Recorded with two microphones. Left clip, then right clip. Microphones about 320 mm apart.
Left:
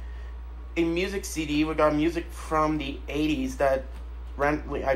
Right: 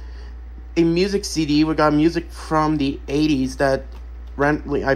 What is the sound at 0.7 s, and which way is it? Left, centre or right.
Speech, centre.